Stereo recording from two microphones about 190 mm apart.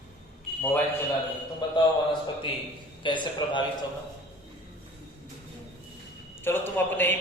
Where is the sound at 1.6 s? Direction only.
20° left (ahead or behind).